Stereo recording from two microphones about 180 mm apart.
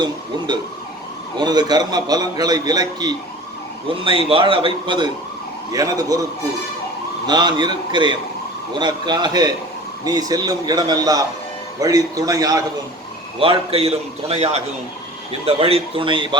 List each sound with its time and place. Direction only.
1.4 s a man's voice: 20° right (ahead or behind)
7.3 s a man's voice: 25° right (ahead or behind)
13.4 s a man's voice: 30° right (ahead or behind)